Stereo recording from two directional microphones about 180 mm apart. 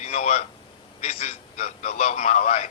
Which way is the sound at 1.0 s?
35° left (ahead or behind).